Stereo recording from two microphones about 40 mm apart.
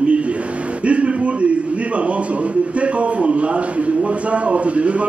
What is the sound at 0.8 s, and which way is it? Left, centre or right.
Speech, right.